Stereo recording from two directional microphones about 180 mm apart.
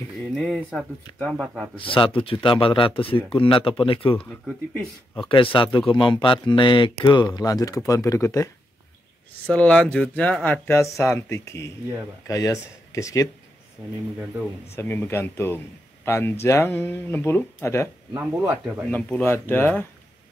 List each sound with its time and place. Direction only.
0.3 s speech: 5° right (ahead or behind)
1.8 s speech: 30° left (ahead or behind)
4.2 s speech: 5° left (ahead or behind)
5.3 s speech: 30° left (ahead or behind)
9.5 s speech: 5° left (ahead or behind)
14.8 s speech: 15° left (ahead or behind)
18.1 s speech: 10° right (ahead or behind)
18.9 s speech: 10° left (ahead or behind)